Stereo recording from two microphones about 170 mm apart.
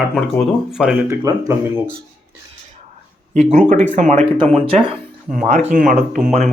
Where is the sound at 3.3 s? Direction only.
40° right (ahead or behind).